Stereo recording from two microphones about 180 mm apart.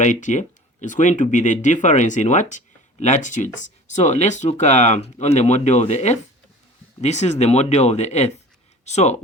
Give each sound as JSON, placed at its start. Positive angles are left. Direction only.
{"t": 0.0, "sound": "speech", "side_deg": 45}